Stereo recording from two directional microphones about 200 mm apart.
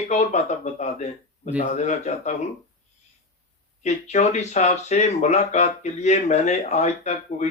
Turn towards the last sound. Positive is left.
turn(degrees=35)  # may be behind; listen again after turning